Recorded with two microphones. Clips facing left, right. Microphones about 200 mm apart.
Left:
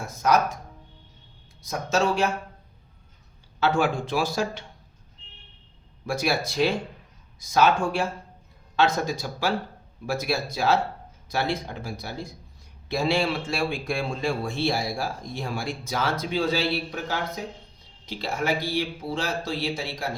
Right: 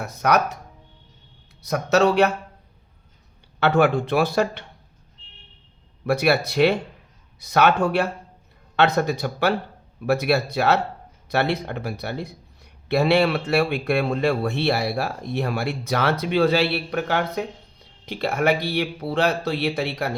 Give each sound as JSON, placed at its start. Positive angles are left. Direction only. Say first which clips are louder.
{"t": 0.0, "sound": "speech", "louder": "right 2 dB", "side_deg": -65}
{"t": 1.6, "sound": "speech", "louder": "right 6 dB", "side_deg": -65}
{"t": 3.6, "sound": "speech", "louder": "right 5 dB", "side_deg": -60}
{"t": 6.1, "sound": "speech", "louder": "right 6 dB", "side_deg": -65}